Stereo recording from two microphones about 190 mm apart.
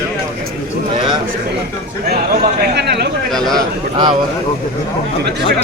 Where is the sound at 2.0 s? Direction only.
60° right (ahead or behind).